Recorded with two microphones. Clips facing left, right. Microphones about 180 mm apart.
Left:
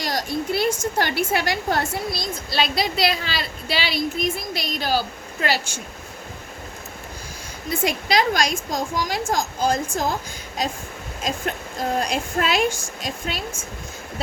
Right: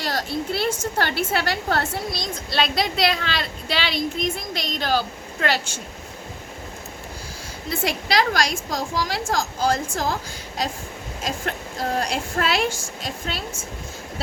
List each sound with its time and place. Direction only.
0.0 s a woman's voice: 15° left (ahead or behind)
2.0 s speech: 5° left (ahead or behind)
7.7 s a woman's voice: 20° left (ahead or behind)
11.2 s a woman's voice: 20° left (ahead or behind)